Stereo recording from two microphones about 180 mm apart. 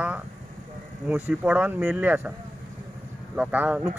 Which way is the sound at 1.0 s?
10° right (ahead or behind).